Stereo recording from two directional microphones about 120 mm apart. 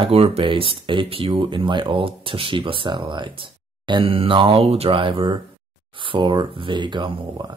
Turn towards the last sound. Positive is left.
turn(degrees=-40)  # may be behind; listen again after turning